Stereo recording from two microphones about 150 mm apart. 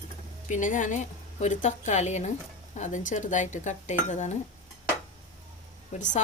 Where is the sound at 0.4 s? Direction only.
55° left (ahead or behind).